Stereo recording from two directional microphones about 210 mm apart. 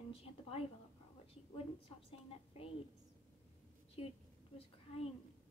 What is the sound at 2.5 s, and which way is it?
Speech, 30° left (ahead or behind).